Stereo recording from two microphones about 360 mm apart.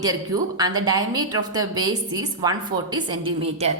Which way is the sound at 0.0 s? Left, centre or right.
Centre.